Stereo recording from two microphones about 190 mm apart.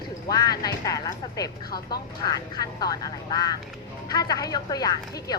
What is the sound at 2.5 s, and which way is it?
A woman's voice, 20° left (ahead or behind).